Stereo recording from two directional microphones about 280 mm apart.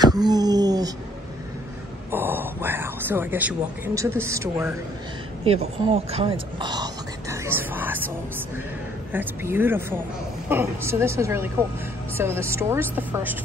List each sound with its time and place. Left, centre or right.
0.0 s a sound: centre
2.0 s speech: centre
6.6 s whispering: centre
9.1 s a woman's voice: centre